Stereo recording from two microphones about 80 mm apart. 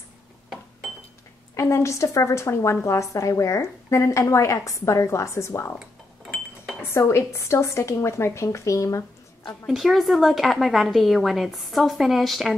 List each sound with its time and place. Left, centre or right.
1.6 s a woman's voice: left
6.9 s a woman's voice: left
9.7 s a woman's voice: centre